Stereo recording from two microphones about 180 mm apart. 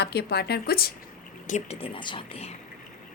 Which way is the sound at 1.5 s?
40° left (ahead or behind).